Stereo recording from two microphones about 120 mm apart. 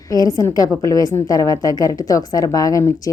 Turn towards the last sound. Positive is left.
turn(degrees=25)  # may be behind; listen again after turning